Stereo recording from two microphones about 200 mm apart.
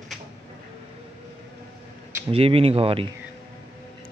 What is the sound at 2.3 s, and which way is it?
Speech, 30° right (ahead or behind).